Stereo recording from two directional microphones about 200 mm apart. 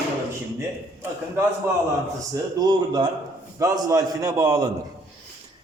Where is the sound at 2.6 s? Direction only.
20° right (ahead or behind).